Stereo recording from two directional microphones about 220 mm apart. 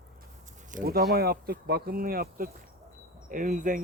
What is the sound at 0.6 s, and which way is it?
Speech, 40° right (ahead or behind).